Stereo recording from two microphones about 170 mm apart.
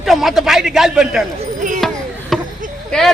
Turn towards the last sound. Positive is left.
turn(degrees=5)  # may be behind; listen again after turning